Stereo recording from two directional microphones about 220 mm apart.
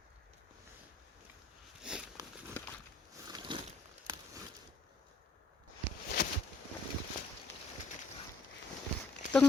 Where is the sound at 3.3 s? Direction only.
20° right (ahead or behind).